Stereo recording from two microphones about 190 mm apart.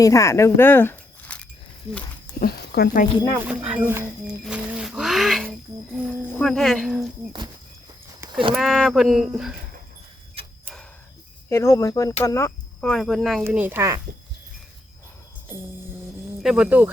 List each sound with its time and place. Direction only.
0.0 s speech: 15° left (ahead or behind)
2.4 s speech: 55° left (ahead or behind)
3.4 s speech: 5° right (ahead or behind)
8.5 s speech: centre (ahead or behind)
11.4 s speech: 15° left (ahead or behind)
13.4 s speech: 10° right (ahead or behind)
16.4 s speech: 5° right (ahead or behind)